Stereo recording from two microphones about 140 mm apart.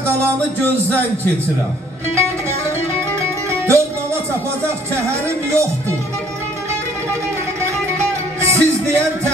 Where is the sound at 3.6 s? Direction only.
20° right (ahead or behind).